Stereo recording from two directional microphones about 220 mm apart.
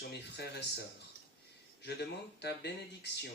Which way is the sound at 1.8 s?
50° left (ahead or behind).